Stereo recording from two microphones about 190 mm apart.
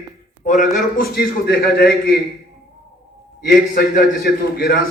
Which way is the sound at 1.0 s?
50° left (ahead or behind).